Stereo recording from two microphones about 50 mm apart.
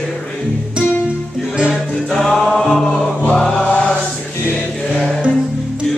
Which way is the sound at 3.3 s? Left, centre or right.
Centre.